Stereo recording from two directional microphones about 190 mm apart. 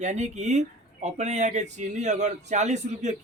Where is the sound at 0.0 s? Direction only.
40° right (ahead or behind).